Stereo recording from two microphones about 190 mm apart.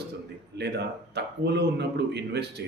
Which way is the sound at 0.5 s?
60° right (ahead or behind).